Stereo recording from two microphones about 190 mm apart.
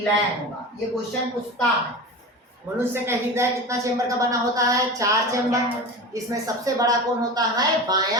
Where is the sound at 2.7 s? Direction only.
10° right (ahead or behind).